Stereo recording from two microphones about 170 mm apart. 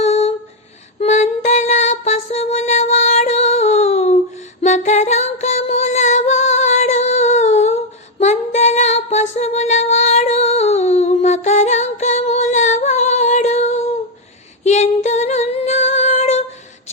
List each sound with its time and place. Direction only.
0.0 s a sound: 40° left (ahead or behind)
0.9 s music: 40° left (ahead or behind)
8.2 s female singing: 40° left (ahead or behind)